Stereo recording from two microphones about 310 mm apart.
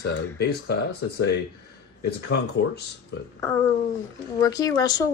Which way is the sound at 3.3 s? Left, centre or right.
Centre.